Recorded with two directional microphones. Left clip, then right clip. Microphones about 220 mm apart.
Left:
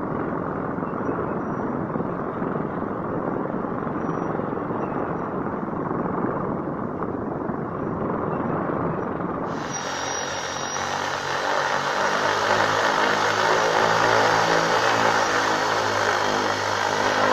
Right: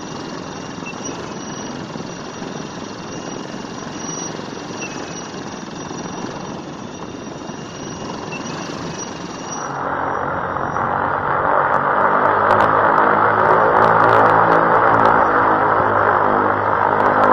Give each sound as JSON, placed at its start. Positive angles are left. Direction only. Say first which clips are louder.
{"t": 9.8, "sound": "vehicle", "louder": "right 9 dB", "side_deg": 20}